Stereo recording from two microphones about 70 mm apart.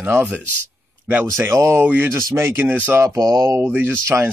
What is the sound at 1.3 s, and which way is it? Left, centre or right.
Speech, right.